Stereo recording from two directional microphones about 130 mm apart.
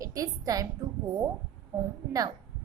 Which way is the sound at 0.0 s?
25° right (ahead or behind).